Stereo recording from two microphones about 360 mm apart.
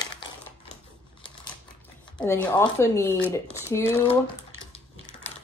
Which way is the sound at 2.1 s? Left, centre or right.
Centre.